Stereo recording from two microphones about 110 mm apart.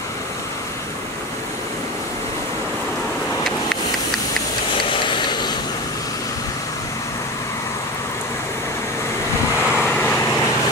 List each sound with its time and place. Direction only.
4.8 s a sound: 50° left (ahead or behind)
9.6 s vehicle: 10° right (ahead or behind)
9.8 s vehicle: 20° left (ahead or behind)